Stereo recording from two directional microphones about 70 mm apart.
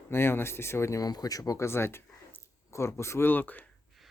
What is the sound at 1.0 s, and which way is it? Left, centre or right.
Speech, left.